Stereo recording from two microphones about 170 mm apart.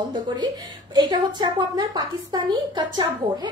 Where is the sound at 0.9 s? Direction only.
25° right (ahead or behind).